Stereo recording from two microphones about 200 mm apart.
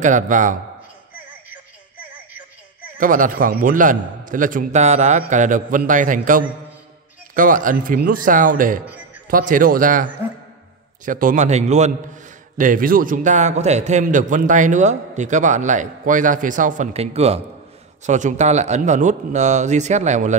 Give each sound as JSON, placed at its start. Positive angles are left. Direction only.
{"t": 0.0, "sound": "a man's voice", "side_deg": -40}
{"t": 2.0, "sound": "music", "side_deg": -10}
{"t": 3.0, "sound": "a man's voice", "side_deg": -40}
{"t": 11.1, "sound": "a man's voice", "side_deg": -40}